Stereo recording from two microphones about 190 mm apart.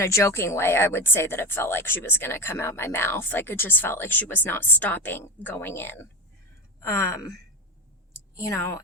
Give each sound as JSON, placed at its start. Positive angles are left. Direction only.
{"t": 0.0, "sound": "speech", "side_deg": 15}
{"t": 8.4, "sound": "speech", "side_deg": 15}